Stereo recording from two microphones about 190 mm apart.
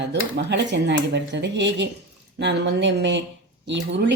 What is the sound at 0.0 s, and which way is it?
A woman's voice, 65° right (ahead or behind).